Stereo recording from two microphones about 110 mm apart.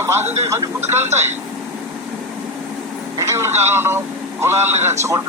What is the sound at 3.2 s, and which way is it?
Speech, 25° right (ahead or behind).